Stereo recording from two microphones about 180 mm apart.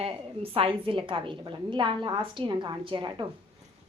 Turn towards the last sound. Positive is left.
turn(degrees=-25)  # may be behind; listen again after turning